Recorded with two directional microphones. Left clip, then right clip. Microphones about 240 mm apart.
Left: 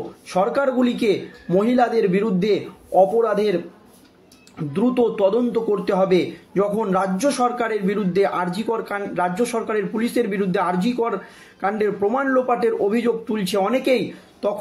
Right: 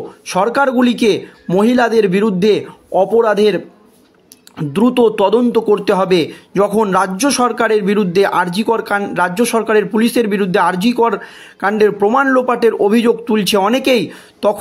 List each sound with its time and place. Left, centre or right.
0.3 s speech: right
4.6 s speech: right